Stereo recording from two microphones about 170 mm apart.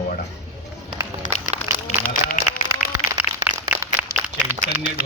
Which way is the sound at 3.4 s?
10° right (ahead or behind).